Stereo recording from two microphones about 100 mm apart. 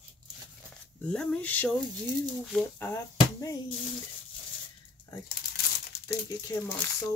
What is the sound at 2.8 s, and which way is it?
Speech, 30° left (ahead or behind).